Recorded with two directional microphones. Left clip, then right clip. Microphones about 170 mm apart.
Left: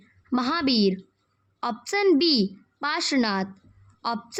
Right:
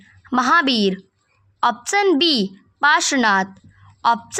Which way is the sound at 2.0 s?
15° right (ahead or behind).